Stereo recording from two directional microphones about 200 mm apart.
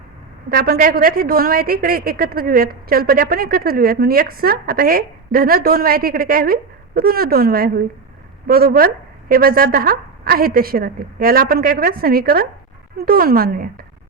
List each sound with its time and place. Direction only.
0.5 s a woman's voice: 50° right (ahead or behind)